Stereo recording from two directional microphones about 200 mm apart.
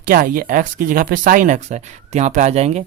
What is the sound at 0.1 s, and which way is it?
Speech, 45° right (ahead or behind).